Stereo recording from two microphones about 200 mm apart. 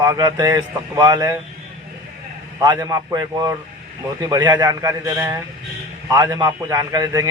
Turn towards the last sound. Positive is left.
turn(degrees=-15)  # may be behind; listen again after turning